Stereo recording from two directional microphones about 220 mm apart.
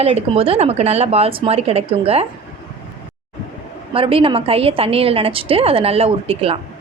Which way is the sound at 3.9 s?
25° right (ahead or behind).